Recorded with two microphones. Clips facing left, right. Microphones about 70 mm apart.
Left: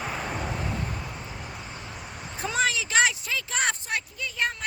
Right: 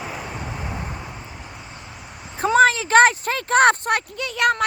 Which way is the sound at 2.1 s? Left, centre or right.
Centre.